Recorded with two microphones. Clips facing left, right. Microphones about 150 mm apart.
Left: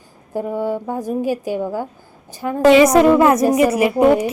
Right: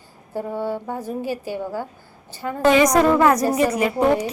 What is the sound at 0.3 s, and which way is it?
A woman's voice, 15° left (ahead or behind).